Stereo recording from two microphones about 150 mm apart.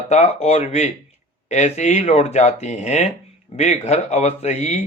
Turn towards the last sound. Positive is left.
turn(degrees=50)  # may be behind; listen again after turning